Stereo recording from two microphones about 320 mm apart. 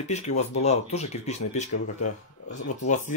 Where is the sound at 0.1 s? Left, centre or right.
Left.